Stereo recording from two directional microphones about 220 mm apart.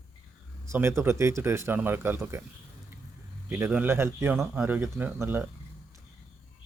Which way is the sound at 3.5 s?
10° right (ahead or behind).